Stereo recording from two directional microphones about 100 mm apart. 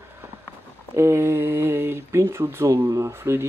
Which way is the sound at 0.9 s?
25° right (ahead or behind).